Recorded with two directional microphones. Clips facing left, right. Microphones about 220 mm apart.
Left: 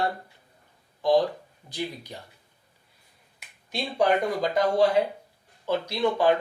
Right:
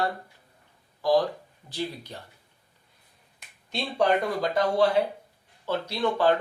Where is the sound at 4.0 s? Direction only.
20° left (ahead or behind).